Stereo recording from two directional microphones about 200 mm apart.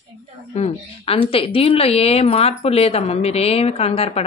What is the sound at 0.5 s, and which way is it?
A woman's voice, 30° left (ahead or behind).